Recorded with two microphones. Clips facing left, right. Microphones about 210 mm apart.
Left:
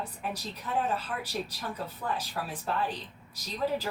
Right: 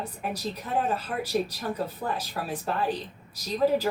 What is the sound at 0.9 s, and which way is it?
Speech, 40° right (ahead or behind).